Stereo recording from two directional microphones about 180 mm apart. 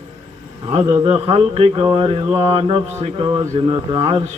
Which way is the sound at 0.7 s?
30° right (ahead or behind).